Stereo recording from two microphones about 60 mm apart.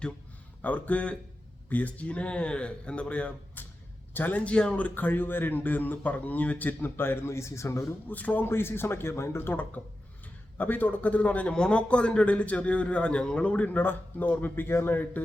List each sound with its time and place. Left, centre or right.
0.6 s a man's voice: left
8.0 s a man's voice: left
8.4 s a man's voice: left
13.7 s a man's voice: left